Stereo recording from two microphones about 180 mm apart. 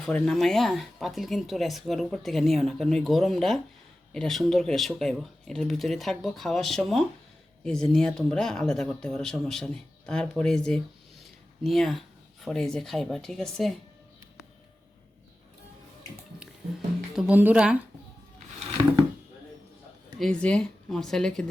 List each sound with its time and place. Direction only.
0.0 s speech: 5° left (ahead or behind)
17.2 s speech: 10° right (ahead or behind)
20.1 s speech: 5° left (ahead or behind)